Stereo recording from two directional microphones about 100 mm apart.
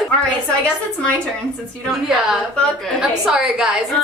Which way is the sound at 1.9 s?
5° right (ahead or behind).